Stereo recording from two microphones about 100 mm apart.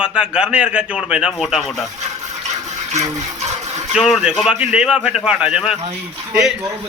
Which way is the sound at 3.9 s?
5° right (ahead or behind).